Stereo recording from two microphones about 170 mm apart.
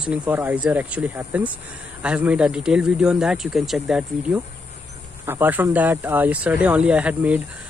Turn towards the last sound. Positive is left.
turn(degrees=-10)  # may be behind; listen again after turning